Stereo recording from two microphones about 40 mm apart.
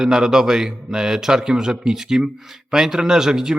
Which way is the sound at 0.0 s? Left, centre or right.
Centre.